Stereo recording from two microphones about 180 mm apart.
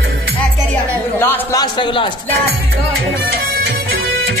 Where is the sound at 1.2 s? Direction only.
15° left (ahead or behind).